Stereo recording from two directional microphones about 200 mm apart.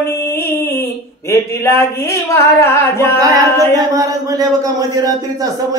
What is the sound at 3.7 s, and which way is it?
A man's voice, 15° right (ahead or behind).